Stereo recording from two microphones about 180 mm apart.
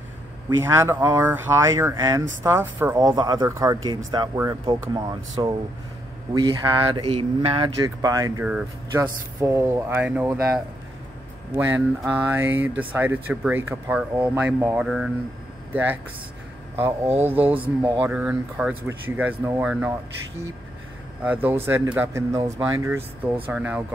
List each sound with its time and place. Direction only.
0.6 s speech: 15° right (ahead or behind)
12.0 s speech: 10° right (ahead or behind)
17.5 s speech: 30° right (ahead or behind)
18.0 s speech: 5° right (ahead or behind)
21.2 s speech: 10° right (ahead or behind)